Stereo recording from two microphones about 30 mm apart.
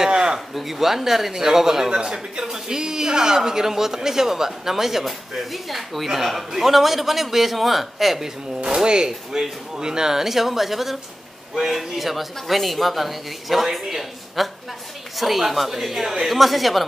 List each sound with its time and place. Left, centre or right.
0.0 s a sound: right
0.6 s a man's voice: centre
1.9 s a man's voice: right; by 8.2 s centre
8.8 s a man's voice: right; by 16.8 s centre